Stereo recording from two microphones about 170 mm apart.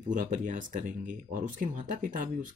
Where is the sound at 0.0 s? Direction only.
50° right (ahead or behind).